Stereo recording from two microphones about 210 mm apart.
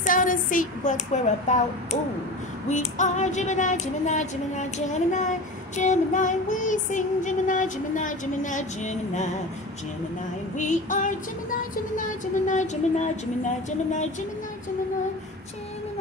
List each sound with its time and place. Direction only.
0.0 s female singing: 40° left (ahead or behind)
10.5 s female singing: 35° left (ahead or behind)
12.4 s female singing: 35° left (ahead or behind)